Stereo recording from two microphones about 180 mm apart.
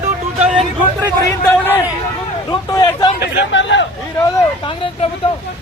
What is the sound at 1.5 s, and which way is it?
Speech, 10° left (ahead or behind).